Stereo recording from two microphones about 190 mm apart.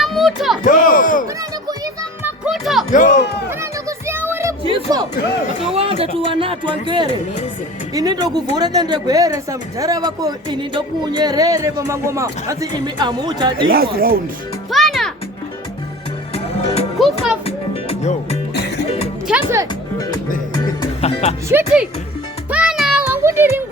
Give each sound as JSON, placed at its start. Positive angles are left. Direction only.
{"t": 0.0, "sound": "a sound", "side_deg": 0}
{"t": 0.6, "sound": "a sound", "side_deg": 45}
{"t": 2.2, "sound": "music", "side_deg": -5}
{"t": 2.9, "sound": "speech", "side_deg": 45}
{"t": 3.6, "sound": "music", "side_deg": -15}
{"t": 4.6, "sound": "speech", "side_deg": -25}
{"t": 13.7, "sound": "speech", "side_deg": -50}
{"t": 14.7, "sound": "music", "side_deg": 0}
{"t": 17.0, "sound": "music", "side_deg": 0}
{"t": 17.4, "sound": "music", "side_deg": 30}
{"t": 18.5, "sound": "music", "side_deg": 60}
{"t": 19.3, "sound": "music", "side_deg": -15}
{"t": 21.0, "sound": "music", "side_deg": 35}
{"t": 22.4, "sound": "music", "side_deg": -5}